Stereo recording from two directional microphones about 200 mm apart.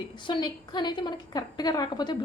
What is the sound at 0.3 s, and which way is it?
A woman's voice, 20° left (ahead or behind).